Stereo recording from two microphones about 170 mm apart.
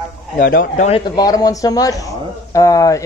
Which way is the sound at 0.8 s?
30° left (ahead or behind).